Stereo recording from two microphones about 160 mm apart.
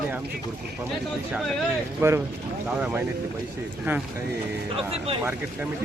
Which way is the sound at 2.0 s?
15° right (ahead or behind).